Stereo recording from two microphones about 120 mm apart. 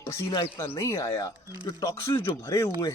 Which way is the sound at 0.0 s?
20° left (ahead or behind).